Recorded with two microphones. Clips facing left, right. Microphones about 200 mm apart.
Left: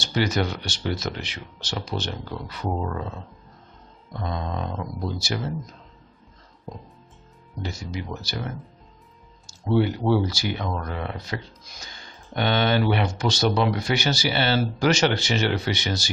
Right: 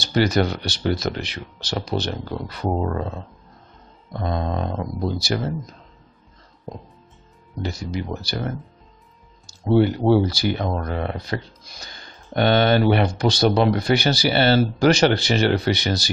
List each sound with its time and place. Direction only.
0.0 s speech: 40° right (ahead or behind)
4.2 s speech: 45° right (ahead or behind)
5.0 s speech: 35° right (ahead or behind)
7.6 s speech: 35° right (ahead or behind)
9.7 s speech: 40° right (ahead or behind)